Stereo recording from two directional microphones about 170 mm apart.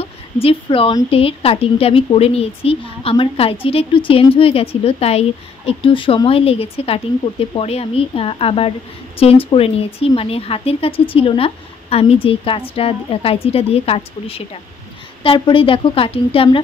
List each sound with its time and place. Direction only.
0.0 s a woman's voice: 35° left (ahead or behind)